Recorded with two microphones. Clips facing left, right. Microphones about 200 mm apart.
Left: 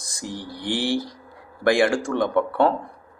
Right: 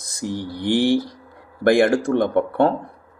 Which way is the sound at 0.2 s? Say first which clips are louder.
Right 6 dB; 55° right (ahead or behind).